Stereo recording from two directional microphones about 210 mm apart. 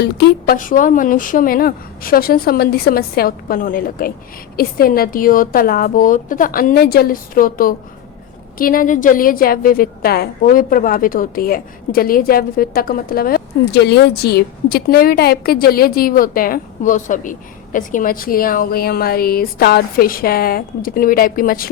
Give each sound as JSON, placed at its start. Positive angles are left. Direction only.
{"t": 0.0, "sound": "a woman's voice", "side_deg": 50}